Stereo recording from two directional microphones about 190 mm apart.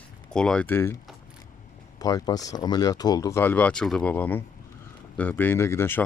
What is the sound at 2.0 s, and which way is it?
Speech, 20° left (ahead or behind).